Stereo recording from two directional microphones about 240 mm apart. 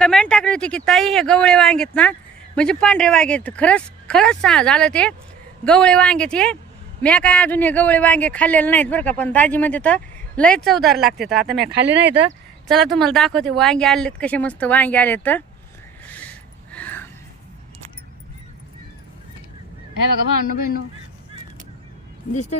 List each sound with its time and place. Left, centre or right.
0.0 s speech: centre
11.5 s speech: right
12.6 s speech: centre
16.1 s a sound: centre
22.3 s speech: left